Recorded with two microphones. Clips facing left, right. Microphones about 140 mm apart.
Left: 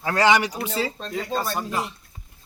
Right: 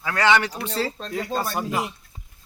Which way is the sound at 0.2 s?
15° left (ahead or behind).